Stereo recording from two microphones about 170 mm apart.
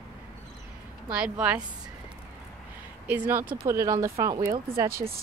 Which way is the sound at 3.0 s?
10° right (ahead or behind).